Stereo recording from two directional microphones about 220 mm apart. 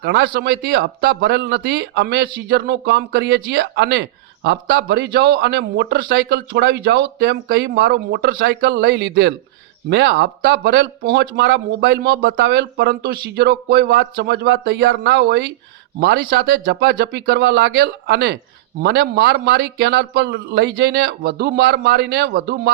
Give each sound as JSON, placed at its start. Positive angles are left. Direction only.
{"t": 0.0, "sound": "speech", "side_deg": -50}